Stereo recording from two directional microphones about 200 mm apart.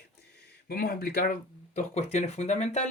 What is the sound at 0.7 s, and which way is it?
Speech, 50° left (ahead or behind).